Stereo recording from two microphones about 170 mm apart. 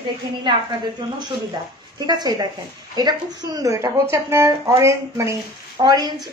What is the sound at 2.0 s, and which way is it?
A woman's voice, 25° right (ahead or behind).